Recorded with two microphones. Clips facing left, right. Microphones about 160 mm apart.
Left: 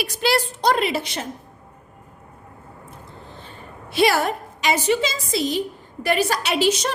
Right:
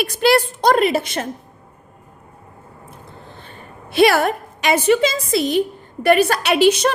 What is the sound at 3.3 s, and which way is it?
A woman's voice, 60° right (ahead or behind).